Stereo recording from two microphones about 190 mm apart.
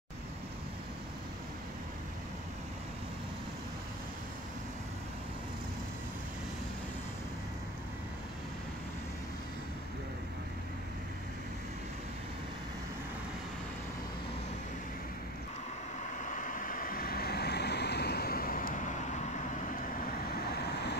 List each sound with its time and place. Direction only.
16.0 s vehicle: 40° left (ahead or behind); by 21.0 s 60° left (ahead or behind)